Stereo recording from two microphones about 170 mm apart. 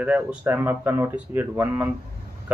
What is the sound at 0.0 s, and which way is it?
Speech, 5° right (ahead or behind).